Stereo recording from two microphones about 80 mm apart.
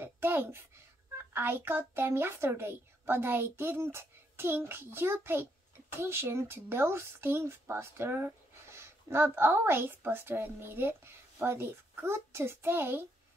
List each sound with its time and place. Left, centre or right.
0.0 s a child's voice: right